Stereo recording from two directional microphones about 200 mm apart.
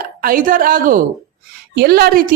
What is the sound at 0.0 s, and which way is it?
A woman's voice, 45° right (ahead or behind).